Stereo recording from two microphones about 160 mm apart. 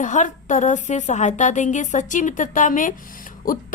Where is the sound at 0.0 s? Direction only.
50° left (ahead or behind).